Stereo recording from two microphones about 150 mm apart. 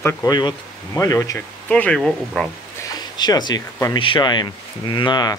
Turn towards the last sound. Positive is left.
turn(degrees=25)  # may be behind; listen again after turning